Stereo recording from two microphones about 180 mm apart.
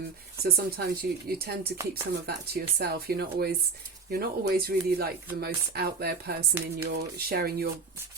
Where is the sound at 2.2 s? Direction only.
60° right (ahead or behind).